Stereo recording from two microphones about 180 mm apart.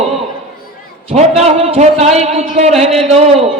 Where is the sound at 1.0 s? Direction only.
35° right (ahead or behind).